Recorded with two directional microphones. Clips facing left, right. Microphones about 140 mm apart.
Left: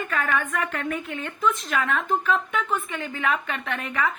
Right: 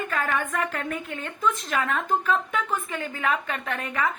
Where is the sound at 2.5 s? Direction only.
35° right (ahead or behind).